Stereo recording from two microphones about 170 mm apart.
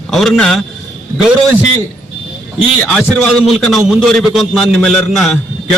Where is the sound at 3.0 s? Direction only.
Centre (ahead or behind).